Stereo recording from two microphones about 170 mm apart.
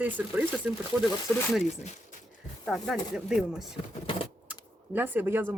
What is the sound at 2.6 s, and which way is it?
Speech, centre (ahead or behind).